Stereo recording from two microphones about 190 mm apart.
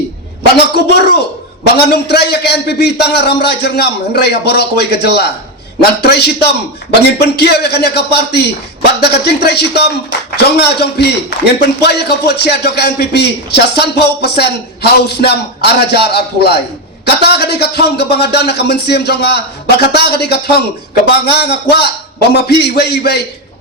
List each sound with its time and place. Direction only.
0.5 s a man's voice: 60° left (ahead or behind)